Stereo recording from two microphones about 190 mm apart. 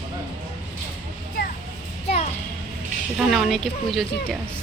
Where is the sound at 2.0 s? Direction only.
35° left (ahead or behind).